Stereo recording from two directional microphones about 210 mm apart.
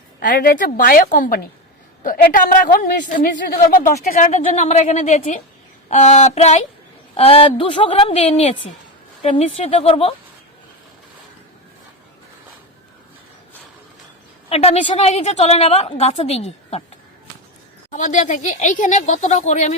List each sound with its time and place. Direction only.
0.2 s speech: 40° left (ahead or behind)
2.0 s a woman's voice: 40° left (ahead or behind)
14.5 s a woman's voice: 30° left (ahead or behind)
17.9 s speech: 35° left (ahead or behind)